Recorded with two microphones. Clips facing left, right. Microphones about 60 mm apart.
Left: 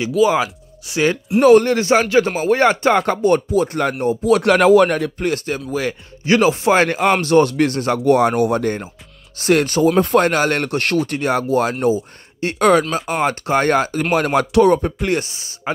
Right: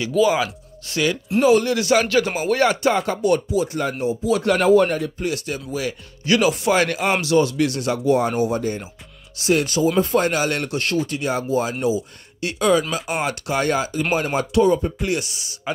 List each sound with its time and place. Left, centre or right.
0.2 s speech: centre
1.4 s speech: left
5.3 s speech: left
8.0 s speech: left
12.9 s speech: left
14.1 s speech: left
15.1 s speech: left